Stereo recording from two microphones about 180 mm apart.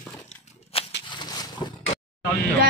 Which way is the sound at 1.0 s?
25° left (ahead or behind).